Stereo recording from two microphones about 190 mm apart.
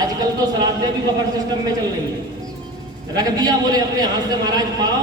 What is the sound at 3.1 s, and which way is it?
Speech, 20° right (ahead or behind).